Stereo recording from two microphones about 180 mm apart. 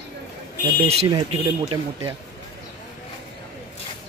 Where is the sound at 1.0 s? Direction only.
30° right (ahead or behind).